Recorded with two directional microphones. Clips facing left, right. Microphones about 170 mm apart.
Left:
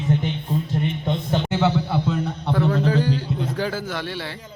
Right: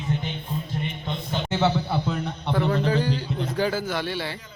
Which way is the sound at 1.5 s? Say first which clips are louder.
Even; centre (ahead or behind).